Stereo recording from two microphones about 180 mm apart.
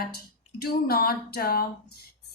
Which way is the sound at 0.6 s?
60° left (ahead or behind).